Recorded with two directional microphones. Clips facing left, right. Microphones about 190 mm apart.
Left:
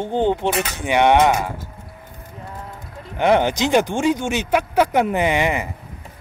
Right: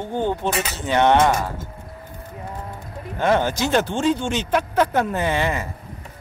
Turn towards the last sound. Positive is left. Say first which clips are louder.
# left 3 dB
turn(degrees=15)  # may be behind; listen again after turning